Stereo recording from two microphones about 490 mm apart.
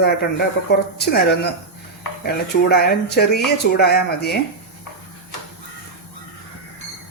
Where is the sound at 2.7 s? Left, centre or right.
Centre.